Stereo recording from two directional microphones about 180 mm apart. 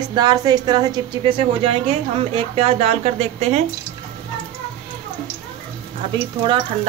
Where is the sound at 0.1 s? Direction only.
25° right (ahead or behind); by 3.6 s 40° right (ahead or behind).